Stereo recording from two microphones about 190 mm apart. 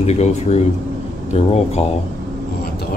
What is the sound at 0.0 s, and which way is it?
Speech, 35° left (ahead or behind).